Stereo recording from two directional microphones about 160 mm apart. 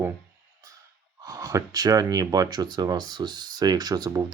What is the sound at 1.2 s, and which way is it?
Speech, 20° right (ahead or behind).